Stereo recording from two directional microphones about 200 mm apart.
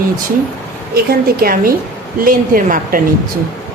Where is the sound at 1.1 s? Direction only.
45° right (ahead or behind).